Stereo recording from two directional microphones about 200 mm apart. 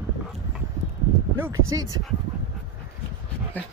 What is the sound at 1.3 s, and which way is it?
Speech, 15° right (ahead or behind).